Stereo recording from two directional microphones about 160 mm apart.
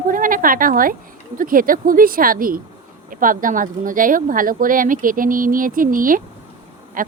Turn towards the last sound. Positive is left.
turn(degrees=-60)  # may be behind; listen again after turning